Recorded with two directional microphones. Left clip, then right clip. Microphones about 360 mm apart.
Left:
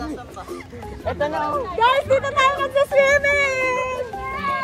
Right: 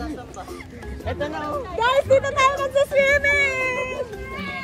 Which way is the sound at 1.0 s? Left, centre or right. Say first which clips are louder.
Left 5 dB; centre.